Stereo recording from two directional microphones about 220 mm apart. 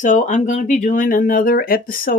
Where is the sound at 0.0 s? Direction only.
35° left (ahead or behind).